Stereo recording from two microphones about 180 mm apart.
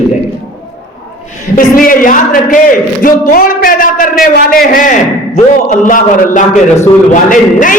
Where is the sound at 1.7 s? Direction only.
50° left (ahead or behind).